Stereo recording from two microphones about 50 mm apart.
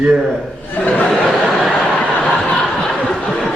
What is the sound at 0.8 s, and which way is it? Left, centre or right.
Speech, left.